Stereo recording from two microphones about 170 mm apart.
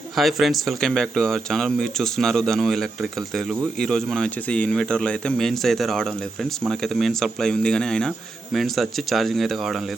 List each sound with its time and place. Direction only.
0.2 s speech: centre (ahead or behind)